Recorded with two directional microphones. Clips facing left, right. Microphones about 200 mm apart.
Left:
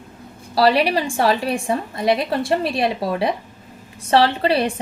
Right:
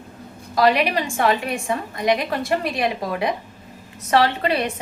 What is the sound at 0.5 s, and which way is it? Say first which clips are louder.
A woman's voice: left 2 dB; 30° left (ahead or behind).